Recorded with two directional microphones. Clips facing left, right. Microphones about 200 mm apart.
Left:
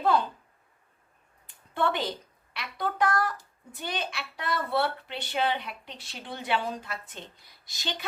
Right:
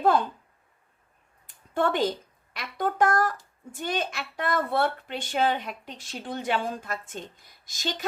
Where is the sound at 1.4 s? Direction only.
45° right (ahead or behind).